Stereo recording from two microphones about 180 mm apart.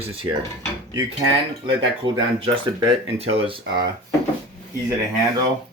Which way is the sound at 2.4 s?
30° right (ahead or behind).